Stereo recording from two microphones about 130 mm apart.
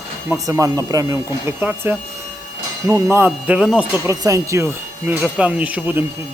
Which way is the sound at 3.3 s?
10° right (ahead or behind).